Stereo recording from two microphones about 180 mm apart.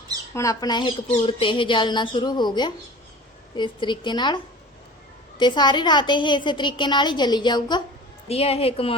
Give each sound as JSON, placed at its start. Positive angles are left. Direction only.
{"t": 0.3, "sound": "a woman's voice", "side_deg": 20}
{"t": 5.4, "sound": "a woman's voice", "side_deg": 25}
{"t": 8.3, "sound": "a woman's voice", "side_deg": 35}